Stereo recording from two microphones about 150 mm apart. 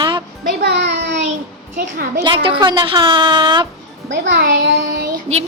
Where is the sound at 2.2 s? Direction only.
35° right (ahead or behind).